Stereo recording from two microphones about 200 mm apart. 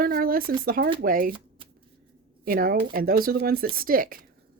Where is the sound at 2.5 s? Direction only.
45° right (ahead or behind).